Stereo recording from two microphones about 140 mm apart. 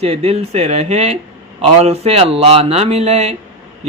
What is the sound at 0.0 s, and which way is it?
A man's voice, 45° right (ahead or behind).